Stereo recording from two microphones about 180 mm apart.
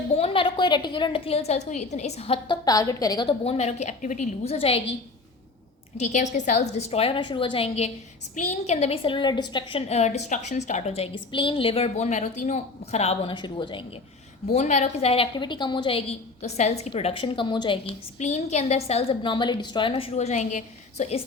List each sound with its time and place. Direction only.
0.2 s a woman's voice: 30° left (ahead or behind)
6.0 s a woman's voice: 40° left (ahead or behind); by 9.8 s 25° left (ahead or behind)
9.9 s a woman's voice: 40° left (ahead or behind)
14.5 s a woman's voice: 40° left (ahead or behind)
18.2 s a woman's voice: 40° left (ahead or behind)